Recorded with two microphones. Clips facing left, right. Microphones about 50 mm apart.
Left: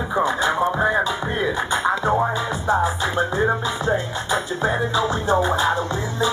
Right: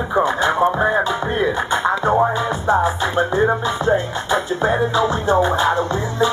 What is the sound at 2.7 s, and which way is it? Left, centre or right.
Music, right.